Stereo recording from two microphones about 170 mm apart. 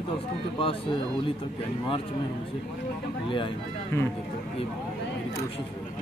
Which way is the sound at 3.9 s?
15° left (ahead or behind).